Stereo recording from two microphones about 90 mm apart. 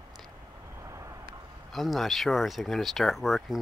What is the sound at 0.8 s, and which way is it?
Vehicle, 35° right (ahead or behind).